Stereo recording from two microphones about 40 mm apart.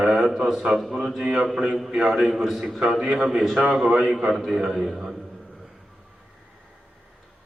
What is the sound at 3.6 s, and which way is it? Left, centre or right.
A man's voice, centre.